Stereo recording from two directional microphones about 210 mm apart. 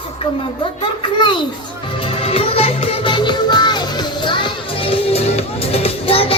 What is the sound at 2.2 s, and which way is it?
Music, 30° left (ahead or behind).